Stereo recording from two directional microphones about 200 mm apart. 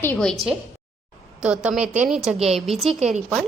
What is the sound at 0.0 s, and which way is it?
A woman's voice, 5° left (ahead or behind).